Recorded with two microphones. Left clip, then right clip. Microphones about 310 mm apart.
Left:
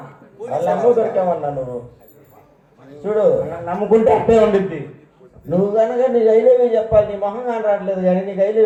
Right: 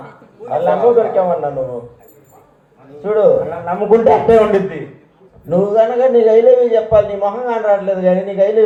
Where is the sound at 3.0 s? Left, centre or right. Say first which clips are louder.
Right 4 dB; right.